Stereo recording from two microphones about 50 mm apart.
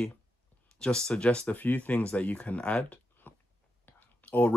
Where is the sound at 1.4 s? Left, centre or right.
Left.